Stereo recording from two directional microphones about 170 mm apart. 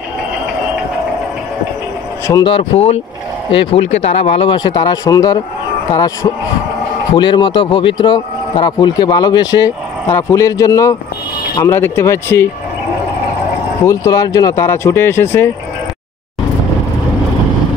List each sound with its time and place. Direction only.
2.4 s a man's voice: 35° left (ahead or behind); by 12.4 s 15° left (ahead or behind)
13.8 s speech: 20° left (ahead or behind)